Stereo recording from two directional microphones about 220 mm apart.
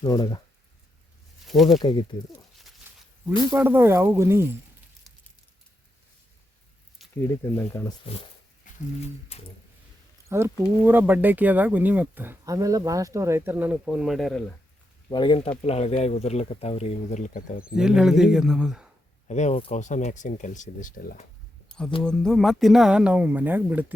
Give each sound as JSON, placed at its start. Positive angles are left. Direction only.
{"t": 0.0, "sound": "speech", "side_deg": 20}
{"t": 1.5, "sound": "speech", "side_deg": 0}
{"t": 1.8, "sound": "speech", "side_deg": 20}
{"t": 3.5, "sound": "speech", "side_deg": -10}
{"t": 7.0, "sound": "a sound", "side_deg": 0}
{"t": 7.5, "sound": "speech", "side_deg": 15}
{"t": 8.0, "sound": "speech", "side_deg": 25}
{"t": 10.2, "sound": "speech", "side_deg": -10}
{"t": 15.1, "sound": "speech", "side_deg": 20}
{"t": 17.7, "sound": "speech", "side_deg": -5}
{"t": 19.3, "sound": "speech", "side_deg": 30}
{"t": 22.0, "sound": "speech", "side_deg": 5}